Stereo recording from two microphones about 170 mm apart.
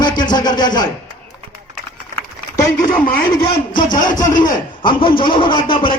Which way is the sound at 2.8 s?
55° left (ahead or behind).